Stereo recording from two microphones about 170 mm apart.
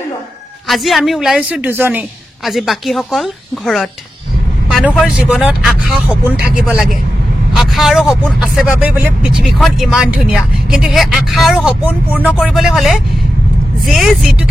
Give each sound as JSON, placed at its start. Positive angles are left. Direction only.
{"t": 0.7, "sound": "speech", "side_deg": 0}